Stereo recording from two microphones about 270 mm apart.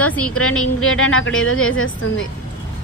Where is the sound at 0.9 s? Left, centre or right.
Left.